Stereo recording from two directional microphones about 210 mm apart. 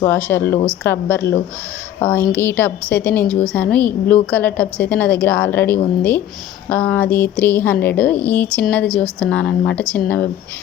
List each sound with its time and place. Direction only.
0.0 s a woman's voice: 10° left (ahead or behind)